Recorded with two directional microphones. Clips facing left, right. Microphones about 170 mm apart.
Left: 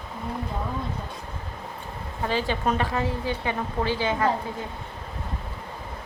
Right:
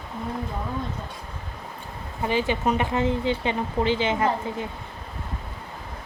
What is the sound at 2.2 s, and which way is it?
A woman's voice, 15° right (ahead or behind).